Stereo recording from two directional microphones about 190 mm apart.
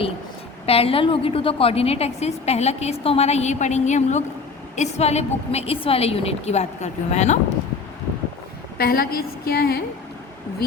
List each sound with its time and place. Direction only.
0.6 s a woman's voice: 30° left (ahead or behind)
8.8 s a woman's voice: 55° left (ahead or behind)